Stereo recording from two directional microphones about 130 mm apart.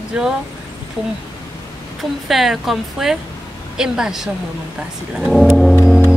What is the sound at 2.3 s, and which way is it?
Speech, centre (ahead or behind).